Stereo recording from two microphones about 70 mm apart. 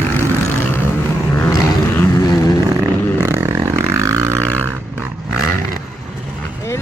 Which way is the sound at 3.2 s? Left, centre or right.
Right.